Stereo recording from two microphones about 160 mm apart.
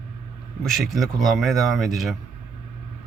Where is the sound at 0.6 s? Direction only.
Centre (ahead or behind).